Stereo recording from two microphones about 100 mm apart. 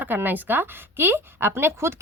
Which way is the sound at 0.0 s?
20° right (ahead or behind).